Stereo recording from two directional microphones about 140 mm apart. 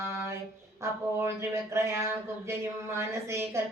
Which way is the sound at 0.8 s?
20° right (ahead or behind).